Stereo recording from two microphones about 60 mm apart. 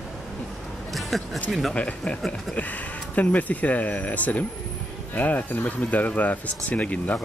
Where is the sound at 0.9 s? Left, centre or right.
Centre.